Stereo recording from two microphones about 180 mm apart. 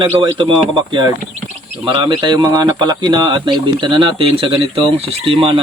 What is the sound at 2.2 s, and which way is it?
Speech, 25° right (ahead or behind).